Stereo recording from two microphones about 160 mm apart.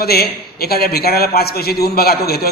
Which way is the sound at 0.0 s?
75° left (ahead or behind).